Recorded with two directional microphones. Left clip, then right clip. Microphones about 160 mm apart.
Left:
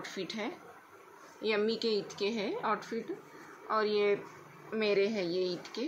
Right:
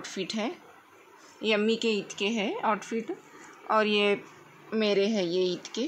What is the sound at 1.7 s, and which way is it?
Speech, 40° right (ahead or behind).